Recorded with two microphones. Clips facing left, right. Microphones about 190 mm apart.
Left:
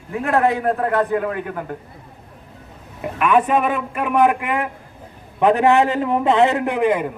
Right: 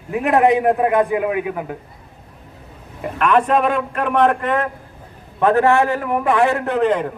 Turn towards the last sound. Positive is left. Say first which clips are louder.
# right 1 dB
turn(degrees=10)  # may be behind; listen again after turning